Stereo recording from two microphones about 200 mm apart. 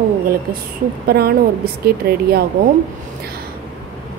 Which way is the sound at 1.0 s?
50° right (ahead or behind).